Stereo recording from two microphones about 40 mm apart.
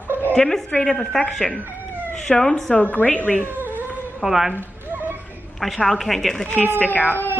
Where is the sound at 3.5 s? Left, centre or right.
Right.